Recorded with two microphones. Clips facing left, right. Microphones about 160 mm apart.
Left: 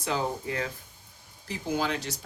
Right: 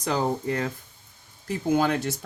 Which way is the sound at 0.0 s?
40° right (ahead or behind).